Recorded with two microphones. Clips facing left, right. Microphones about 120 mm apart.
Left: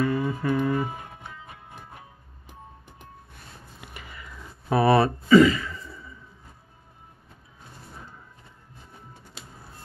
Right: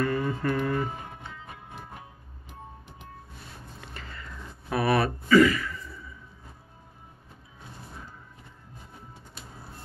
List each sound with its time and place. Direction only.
0.0 s mantra: 10° left (ahead or behind)
3.8 s a sound: 10° left (ahead or behind)
4.6 s speech: 30° left (ahead or behind)